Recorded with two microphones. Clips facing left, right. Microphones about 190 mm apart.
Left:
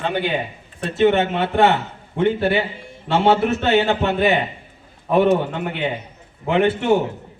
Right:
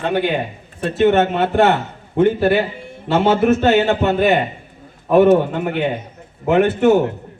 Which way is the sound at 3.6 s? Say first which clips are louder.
Right 3 dB; 50° right (ahead or behind).